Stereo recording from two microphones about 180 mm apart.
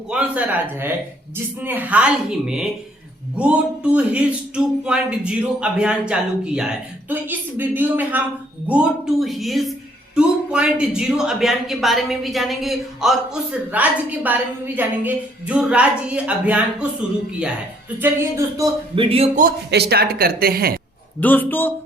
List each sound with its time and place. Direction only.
0.1 s a woman's voice: 5° right (ahead or behind)
18.0 s speech: 15° right (ahead or behind)
18.9 s speech: 30° right (ahead or behind)
19.4 s a woman's voice: 60° right (ahead or behind)
21.2 s a man's voice: 10° left (ahead or behind)